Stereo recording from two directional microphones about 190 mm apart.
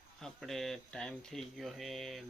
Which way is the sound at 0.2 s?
Centre (ahead or behind).